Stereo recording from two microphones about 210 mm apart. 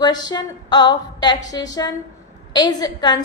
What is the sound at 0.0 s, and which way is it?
A woman's voice, 20° left (ahead or behind).